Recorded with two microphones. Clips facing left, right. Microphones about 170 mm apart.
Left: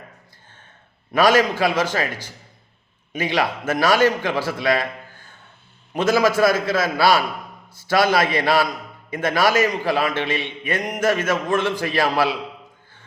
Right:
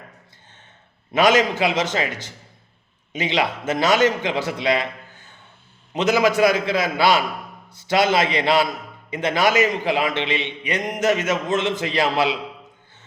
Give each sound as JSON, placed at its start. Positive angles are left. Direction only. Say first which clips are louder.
{"t": 1.1, "sound": "a man's voice", "louder": "left 1 dB", "side_deg": -20}